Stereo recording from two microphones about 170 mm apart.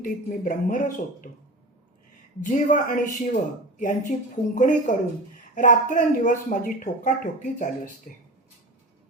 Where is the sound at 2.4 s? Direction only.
50° left (ahead or behind).